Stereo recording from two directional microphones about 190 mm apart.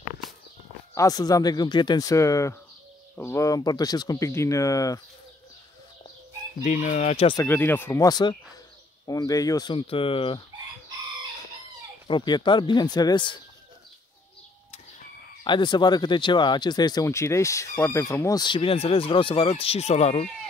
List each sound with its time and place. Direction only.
0.9 s speech: 20° left (ahead or behind)
6.6 s speech: 40° left (ahead or behind)
7.3 s speech: 10° left (ahead or behind); by 10.4 s 30° left (ahead or behind)
12.1 s speech: 25° left (ahead or behind)
15.4 s speech: 25° left (ahead or behind)